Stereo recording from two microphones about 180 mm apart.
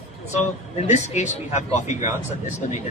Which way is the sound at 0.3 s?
40° left (ahead or behind).